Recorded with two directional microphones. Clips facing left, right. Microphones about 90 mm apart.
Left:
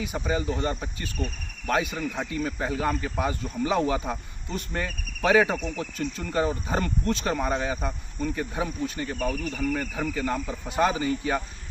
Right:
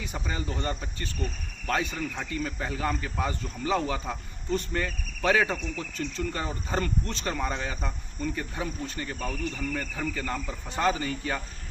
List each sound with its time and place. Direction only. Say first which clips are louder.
0.0 s speech: left 6 dB; 15° left (ahead or behind)